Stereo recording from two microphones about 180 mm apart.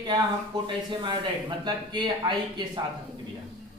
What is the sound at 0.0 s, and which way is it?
Speech, 25° right (ahead or behind).